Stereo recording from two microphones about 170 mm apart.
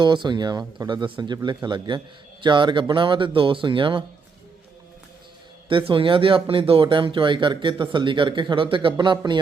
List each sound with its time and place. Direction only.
0.0 s speech: 25° right (ahead or behind)
5.6 s speech: 30° right (ahead or behind)